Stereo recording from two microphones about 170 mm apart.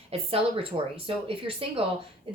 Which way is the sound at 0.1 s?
35° right (ahead or behind).